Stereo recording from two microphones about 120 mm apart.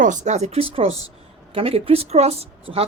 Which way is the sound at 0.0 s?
85° right.